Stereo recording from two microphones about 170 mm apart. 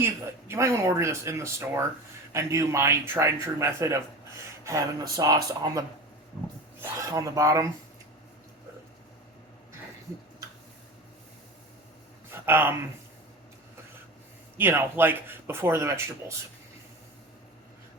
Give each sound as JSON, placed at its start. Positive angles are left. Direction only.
{"t": 0.0, "sound": "speech", "side_deg": -15}
{"t": 7.1, "sound": "speech", "side_deg": -20}
{"t": 12.5, "sound": "speech", "side_deg": -10}
{"t": 14.6, "sound": "speech", "side_deg": -15}